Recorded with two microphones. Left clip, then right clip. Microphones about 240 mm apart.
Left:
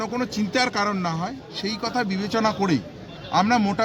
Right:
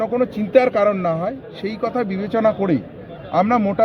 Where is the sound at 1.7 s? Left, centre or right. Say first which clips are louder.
Right 6 dB; right.